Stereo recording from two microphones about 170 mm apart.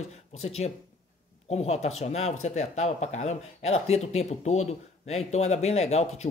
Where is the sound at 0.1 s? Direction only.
40° left (ahead or behind).